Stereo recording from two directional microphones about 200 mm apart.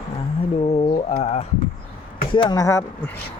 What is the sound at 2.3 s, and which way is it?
Speech, 20° left (ahead or behind).